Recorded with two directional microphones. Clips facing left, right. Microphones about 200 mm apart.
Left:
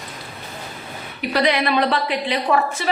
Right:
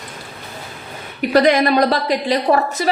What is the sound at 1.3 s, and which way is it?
A woman's voice, 45° right (ahead or behind).